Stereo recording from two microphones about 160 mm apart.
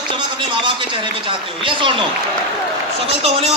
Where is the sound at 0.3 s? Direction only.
30° right (ahead or behind).